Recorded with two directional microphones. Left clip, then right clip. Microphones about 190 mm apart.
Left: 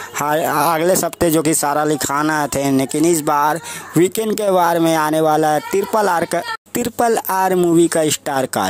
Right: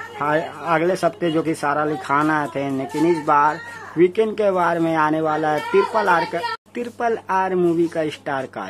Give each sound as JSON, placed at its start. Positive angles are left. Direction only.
{"t": 0.2, "sound": "speech", "side_deg": 55}